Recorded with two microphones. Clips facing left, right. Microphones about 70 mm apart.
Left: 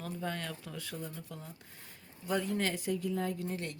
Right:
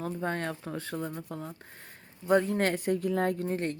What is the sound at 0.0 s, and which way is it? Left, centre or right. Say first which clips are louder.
Speech: right 6 dB; right.